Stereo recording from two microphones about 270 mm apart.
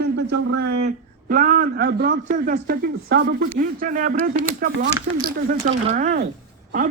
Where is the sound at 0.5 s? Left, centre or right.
Right.